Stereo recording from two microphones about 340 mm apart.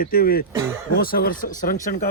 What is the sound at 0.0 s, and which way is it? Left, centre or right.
Speech, left.